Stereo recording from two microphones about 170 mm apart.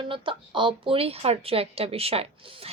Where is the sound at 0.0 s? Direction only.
30° right (ahead or behind).